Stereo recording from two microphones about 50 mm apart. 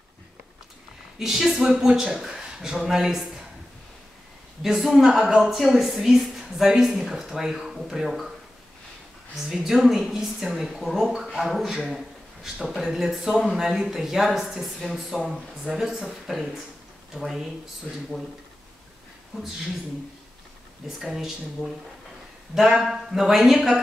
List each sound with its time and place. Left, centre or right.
1.2 s speech: centre
4.6 s speech: centre
9.4 s a woman's voice: centre
17.9 s speech: left
19.3 s a woman's voice: centre
20.8 s speech: centre
22.5 s speech: centre